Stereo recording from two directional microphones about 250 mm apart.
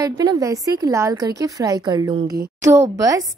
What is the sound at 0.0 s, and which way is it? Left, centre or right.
A woman's voice, centre.